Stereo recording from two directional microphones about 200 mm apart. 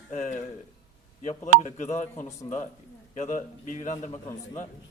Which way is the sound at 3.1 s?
40° left (ahead or behind).